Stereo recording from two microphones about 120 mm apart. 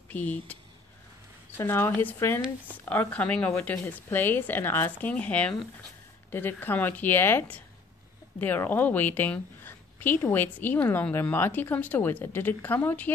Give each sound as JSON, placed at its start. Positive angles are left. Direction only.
{"t": 0.1, "sound": "a woman's voice", "side_deg": 10}
{"t": 1.6, "sound": "a woman's voice", "side_deg": 20}